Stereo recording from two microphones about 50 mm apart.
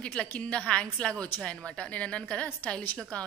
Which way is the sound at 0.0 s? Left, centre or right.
Centre.